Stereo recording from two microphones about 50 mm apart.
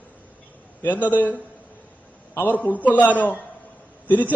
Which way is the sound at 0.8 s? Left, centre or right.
Left.